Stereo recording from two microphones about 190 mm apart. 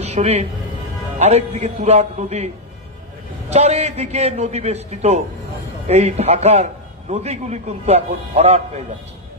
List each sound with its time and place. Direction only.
0.0 s a man's voice: 35° right (ahead or behind)